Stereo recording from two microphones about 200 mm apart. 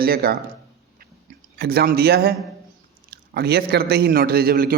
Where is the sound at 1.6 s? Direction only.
50° right (ahead or behind).